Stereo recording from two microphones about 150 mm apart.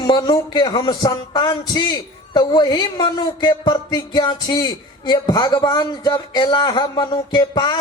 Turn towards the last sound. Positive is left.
turn(degrees=30)  # may be behind; listen again after turning